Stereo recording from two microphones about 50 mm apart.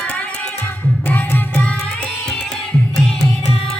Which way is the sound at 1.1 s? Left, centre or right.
Left.